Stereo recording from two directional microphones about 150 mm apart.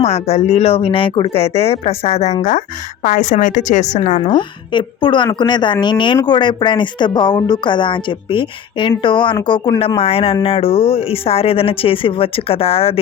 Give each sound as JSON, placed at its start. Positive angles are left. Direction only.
{"t": 0.0, "sound": "a woman's voice", "side_deg": 45}
{"t": 4.2, "sound": "a woman's voice", "side_deg": 35}